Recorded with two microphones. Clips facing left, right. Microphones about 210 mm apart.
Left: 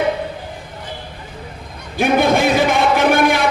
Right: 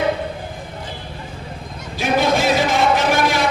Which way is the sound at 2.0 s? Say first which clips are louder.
Left 3 dB; 55° left (ahead or behind).